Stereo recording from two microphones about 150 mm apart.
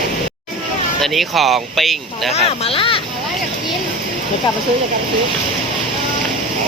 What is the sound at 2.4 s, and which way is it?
Speech, 40° left (ahead or behind).